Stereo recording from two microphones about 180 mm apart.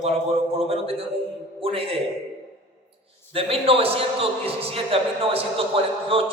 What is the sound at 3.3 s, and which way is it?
A man's voice, 30° right (ahead or behind).